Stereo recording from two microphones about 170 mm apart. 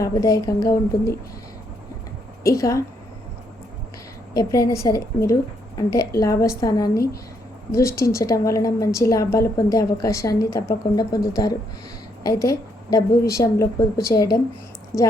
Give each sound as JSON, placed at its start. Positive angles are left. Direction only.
{"t": 0.0, "sound": "a woman's voice", "side_deg": 20}
{"t": 2.4, "sound": "a woman's voice", "side_deg": 20}
{"t": 4.4, "sound": "a woman's voice", "side_deg": 20}
{"t": 12.2, "sound": "a woman's voice", "side_deg": 20}